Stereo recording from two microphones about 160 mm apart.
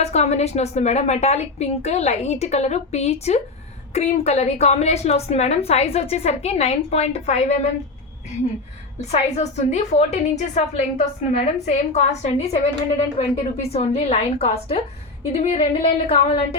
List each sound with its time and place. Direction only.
0.0 s a woman's voice: 45° left (ahead or behind)
9.0 s a woman's voice: 45° left (ahead or behind)